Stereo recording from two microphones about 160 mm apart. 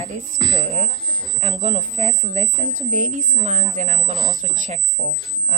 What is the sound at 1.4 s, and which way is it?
Speech, 45° right (ahead or behind).